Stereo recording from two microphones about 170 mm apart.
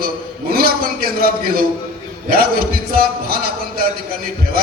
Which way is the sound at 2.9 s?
60° right (ahead or behind).